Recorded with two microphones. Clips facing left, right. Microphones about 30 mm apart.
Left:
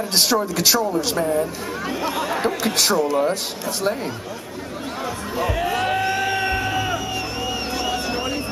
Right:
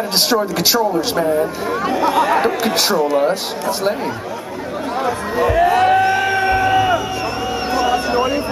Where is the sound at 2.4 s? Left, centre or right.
Right.